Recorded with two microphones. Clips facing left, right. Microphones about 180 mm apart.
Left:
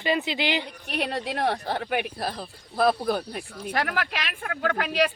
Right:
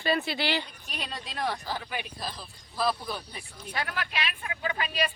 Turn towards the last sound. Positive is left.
turn(degrees=90)